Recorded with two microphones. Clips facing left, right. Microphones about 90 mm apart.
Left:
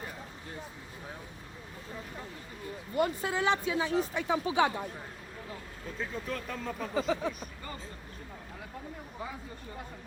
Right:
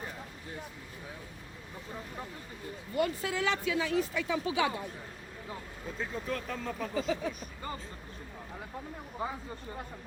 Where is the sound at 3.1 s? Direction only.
20° left (ahead or behind).